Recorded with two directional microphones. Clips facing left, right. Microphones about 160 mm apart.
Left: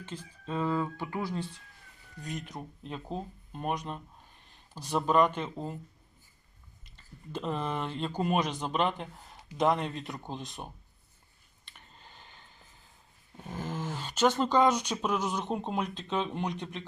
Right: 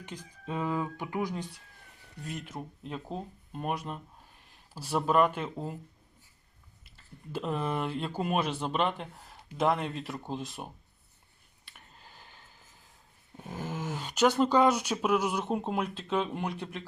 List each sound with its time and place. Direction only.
0.0 s speech: 15° right (ahead or behind)
2.2 s speech: centre (ahead or behind)
6.8 s speech: 5° right (ahead or behind)
11.6 s a sound: 5° right (ahead or behind)
13.3 s speech: 15° right (ahead or behind)